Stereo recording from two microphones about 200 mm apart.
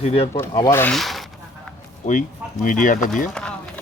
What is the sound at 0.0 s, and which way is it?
Speech, 30° left (ahead or behind).